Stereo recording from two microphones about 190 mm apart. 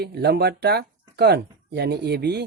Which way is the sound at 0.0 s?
55° right (ahead or behind).